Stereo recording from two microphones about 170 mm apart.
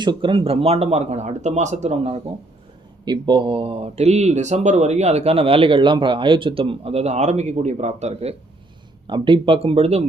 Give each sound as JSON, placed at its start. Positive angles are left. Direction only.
{"t": 0.0, "sound": "speech", "side_deg": -30}
{"t": 3.0, "sound": "speech", "side_deg": -25}